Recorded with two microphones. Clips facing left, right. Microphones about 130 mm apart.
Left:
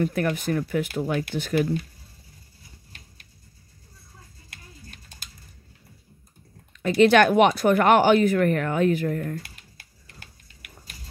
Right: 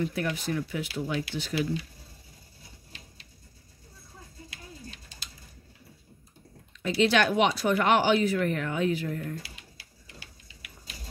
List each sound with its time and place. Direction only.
0.0 s speech: 50° left (ahead or behind)
4.5 s a sound: 50° left (ahead or behind)
6.7 s speech: 55° left (ahead or behind)